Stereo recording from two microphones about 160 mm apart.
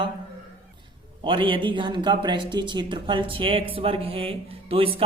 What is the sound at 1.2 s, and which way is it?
Speech, 30° right (ahead or behind).